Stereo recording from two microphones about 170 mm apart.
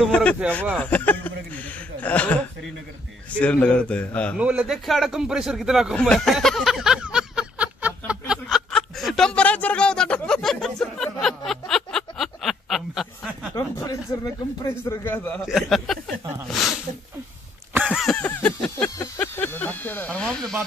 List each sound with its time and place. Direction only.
0.0 s speech: 5° left (ahead or behind)
4.4 s a sound: 5° right (ahead or behind)
13.6 s speech: 20° left (ahead or behind)
15.4 s a man's voice: centre (ahead or behind)
16.5 s snake: centre (ahead or behind)
17.7 s a sound: 5° right (ahead or behind)